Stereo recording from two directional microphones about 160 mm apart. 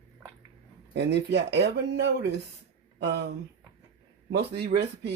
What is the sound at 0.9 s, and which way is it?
Speech, 90° right.